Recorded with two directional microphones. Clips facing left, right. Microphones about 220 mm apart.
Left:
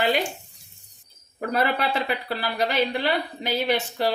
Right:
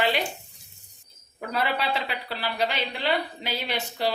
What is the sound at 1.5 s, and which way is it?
Speech, 50° left (ahead or behind).